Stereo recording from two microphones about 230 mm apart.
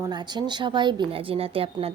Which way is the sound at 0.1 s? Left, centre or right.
Centre.